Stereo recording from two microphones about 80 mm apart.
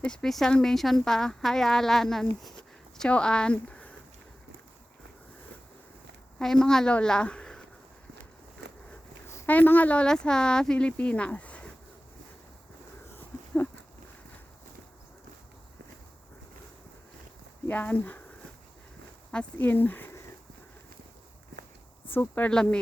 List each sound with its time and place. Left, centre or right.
0.0 s speech: centre
6.4 s a woman's voice: centre
9.5 s speech: centre
13.1 s a sound: left
17.7 s speech: left
19.3 s speech: centre
22.1 s speech: left
22.4 s speech: centre